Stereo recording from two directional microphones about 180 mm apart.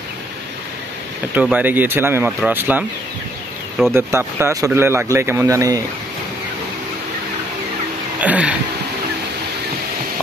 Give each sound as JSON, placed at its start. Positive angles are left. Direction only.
{"t": 1.3, "sound": "speech", "side_deg": -10}
{"t": 3.9, "sound": "speech", "side_deg": -15}
{"t": 8.2, "sound": "a sound", "side_deg": -5}